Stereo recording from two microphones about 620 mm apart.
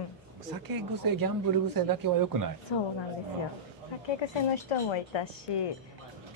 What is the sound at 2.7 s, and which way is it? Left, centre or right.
Speech, left.